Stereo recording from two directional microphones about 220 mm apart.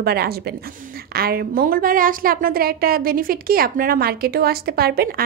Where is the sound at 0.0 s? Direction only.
45° right (ahead or behind).